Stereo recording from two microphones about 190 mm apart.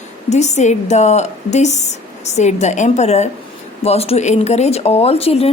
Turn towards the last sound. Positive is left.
turn(degrees=30)  # may be behind; listen again after turning